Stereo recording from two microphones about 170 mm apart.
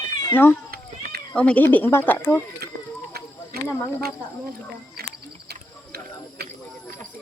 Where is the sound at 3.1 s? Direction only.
65° right (ahead or behind).